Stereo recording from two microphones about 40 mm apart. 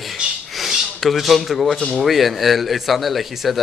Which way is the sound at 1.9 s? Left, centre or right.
Centre.